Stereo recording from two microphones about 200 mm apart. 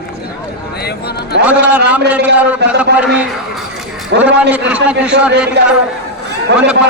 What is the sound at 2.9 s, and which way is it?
Speech, 55° right (ahead or behind).